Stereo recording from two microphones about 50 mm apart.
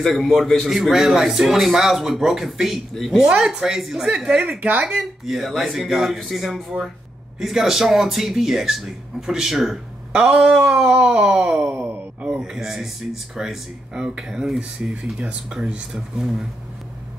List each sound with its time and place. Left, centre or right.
0.0 s a man's voice: centre
2.9 s speech: centre
3.2 s speech: centre
4.6 s speech: right
4.8 s a man's voice: centre
10.2 s speech: centre
12.5 s speech: centre